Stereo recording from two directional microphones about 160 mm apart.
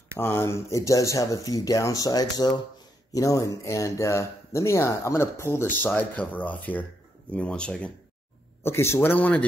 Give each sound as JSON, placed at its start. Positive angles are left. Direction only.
{"t": 0.2, "sound": "speech", "side_deg": 15}